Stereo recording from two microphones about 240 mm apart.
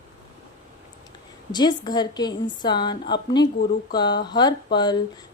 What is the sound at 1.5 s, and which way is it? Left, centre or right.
A woman's voice, centre.